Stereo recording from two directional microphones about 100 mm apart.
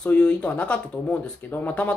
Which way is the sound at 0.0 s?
10° left (ahead or behind).